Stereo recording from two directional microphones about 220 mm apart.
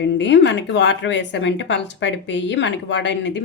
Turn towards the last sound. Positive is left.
turn(degrees=55)  # may be behind; listen again after turning